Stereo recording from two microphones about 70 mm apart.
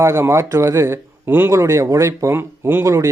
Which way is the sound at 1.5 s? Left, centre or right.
Right.